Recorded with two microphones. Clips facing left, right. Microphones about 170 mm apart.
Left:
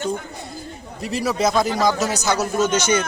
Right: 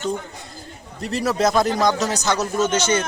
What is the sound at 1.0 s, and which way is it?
A man's voice, centre (ahead or behind).